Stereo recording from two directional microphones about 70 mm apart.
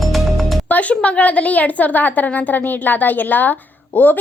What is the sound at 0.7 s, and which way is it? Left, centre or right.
A woman's voice, left.